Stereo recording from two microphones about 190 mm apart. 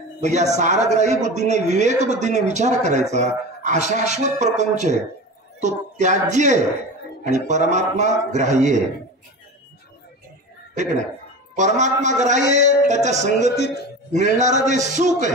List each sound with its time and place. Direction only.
0.2 s speech: 35° right (ahead or behind)
11.5 s speech: 40° right (ahead or behind)